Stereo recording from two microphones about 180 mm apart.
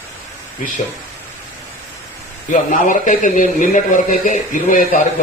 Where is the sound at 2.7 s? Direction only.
45° left (ahead or behind).